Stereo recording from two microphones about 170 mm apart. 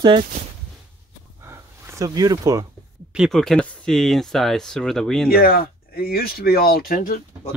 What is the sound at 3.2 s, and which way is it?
Speech, centre (ahead or behind).